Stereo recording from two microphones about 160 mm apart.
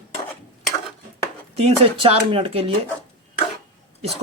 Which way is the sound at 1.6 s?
35° right (ahead or behind).